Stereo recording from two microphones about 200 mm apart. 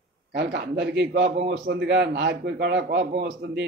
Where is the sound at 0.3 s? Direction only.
50° right (ahead or behind).